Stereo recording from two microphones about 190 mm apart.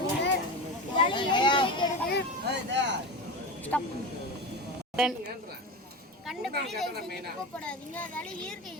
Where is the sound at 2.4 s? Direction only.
65° right (ahead or behind).